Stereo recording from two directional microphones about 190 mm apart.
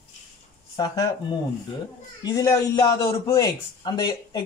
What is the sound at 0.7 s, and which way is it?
Speech, 20° left (ahead or behind).